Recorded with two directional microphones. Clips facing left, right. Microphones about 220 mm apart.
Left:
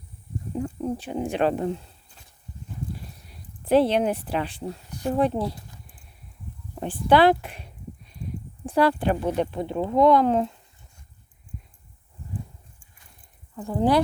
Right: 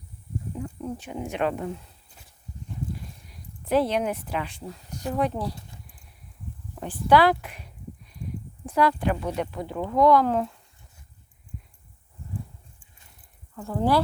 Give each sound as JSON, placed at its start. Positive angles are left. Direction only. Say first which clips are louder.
{"t": 0.6, "sound": "speech", "louder": "left 7 dB", "side_deg": 35}
{"t": 3.2, "sound": "speech", "louder": "left 5 dB", "side_deg": 30}
{"t": 6.7, "sound": "a sound", "louder": "left 1 dB", "side_deg": 25}
{"t": 8.6, "sound": "speech", "louder": "left 2 dB", "side_deg": 30}
{"t": 13.6, "sound": "speech", "louder": "left 2 dB", "side_deg": 15}